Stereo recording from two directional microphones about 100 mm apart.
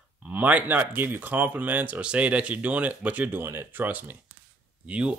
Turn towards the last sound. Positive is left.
turn(degrees=-10)  # may be behind; listen again after turning